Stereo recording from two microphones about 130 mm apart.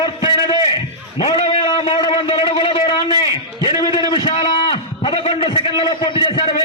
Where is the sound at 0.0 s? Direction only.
40° left (ahead or behind).